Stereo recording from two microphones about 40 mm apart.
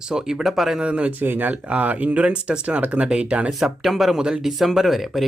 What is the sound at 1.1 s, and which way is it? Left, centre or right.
Speech, right.